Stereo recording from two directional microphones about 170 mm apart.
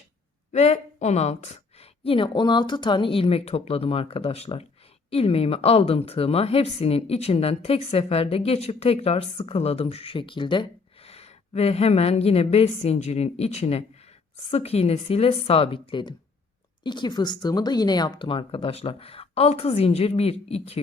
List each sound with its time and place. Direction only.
0.5 s a woman's voice: 40° left (ahead or behind)